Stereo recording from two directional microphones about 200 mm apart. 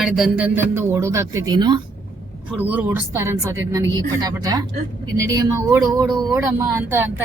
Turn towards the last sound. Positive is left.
turn(degrees=-10)  # may be behind; listen again after turning